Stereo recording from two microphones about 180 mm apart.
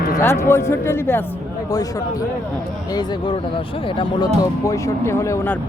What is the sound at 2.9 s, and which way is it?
Speech, 25° left (ahead or behind).